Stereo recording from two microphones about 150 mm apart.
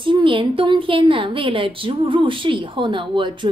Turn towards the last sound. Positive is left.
turn(degrees=-35)  # may be behind; listen again after turning